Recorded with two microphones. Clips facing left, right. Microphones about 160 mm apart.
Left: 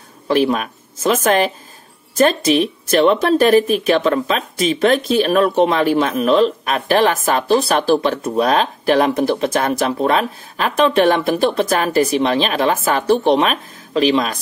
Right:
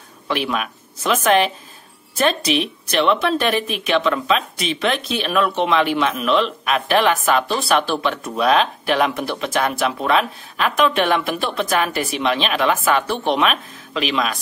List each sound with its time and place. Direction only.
0.3 s speech: 40° left (ahead or behind)